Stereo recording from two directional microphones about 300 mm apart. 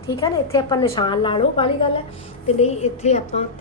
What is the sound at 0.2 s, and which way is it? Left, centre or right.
A woman's voice, centre.